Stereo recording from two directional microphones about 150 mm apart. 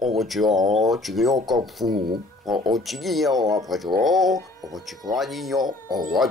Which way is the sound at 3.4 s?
25° right (ahead or behind).